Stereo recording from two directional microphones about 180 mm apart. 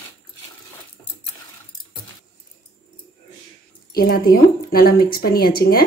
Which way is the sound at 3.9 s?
55° left (ahead or behind).